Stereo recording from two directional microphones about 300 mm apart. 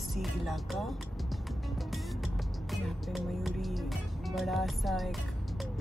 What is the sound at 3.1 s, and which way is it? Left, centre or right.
Speech, centre.